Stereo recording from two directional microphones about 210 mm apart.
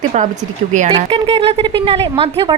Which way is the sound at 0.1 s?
30° right (ahead or behind).